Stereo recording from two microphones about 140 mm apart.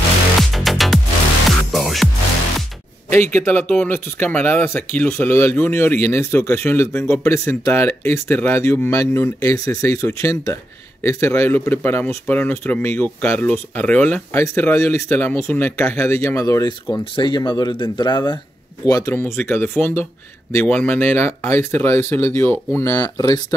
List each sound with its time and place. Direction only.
0.4 s music: centre (ahead or behind)
3.1 s speech: 15° left (ahead or behind)
17.0 s speech: 35° left (ahead or behind)